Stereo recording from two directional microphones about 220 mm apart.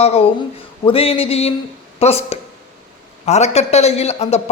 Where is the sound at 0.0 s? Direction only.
30° left (ahead or behind).